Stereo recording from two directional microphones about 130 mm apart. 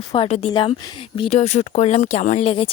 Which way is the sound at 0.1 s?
50° left (ahead or behind).